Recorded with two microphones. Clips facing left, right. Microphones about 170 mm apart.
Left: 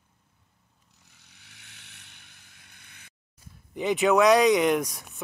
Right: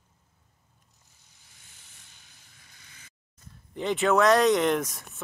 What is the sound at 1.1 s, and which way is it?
Boat, 75° left (ahead or behind).